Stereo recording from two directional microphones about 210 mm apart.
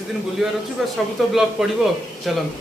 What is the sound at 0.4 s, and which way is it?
Speech, 5° right (ahead or behind).